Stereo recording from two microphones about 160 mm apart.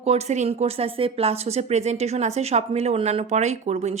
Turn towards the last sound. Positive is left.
turn(degrees=-45)  # may be behind; listen again after turning